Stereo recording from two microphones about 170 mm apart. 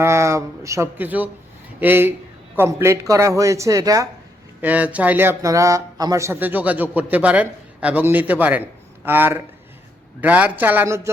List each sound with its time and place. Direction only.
0.0 s speech: 15° right (ahead or behind)
4.6 s speech: 10° right (ahead or behind)